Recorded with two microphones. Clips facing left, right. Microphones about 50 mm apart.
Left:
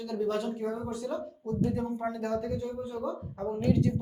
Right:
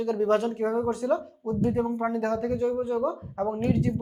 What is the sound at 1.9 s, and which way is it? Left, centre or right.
Speech, right.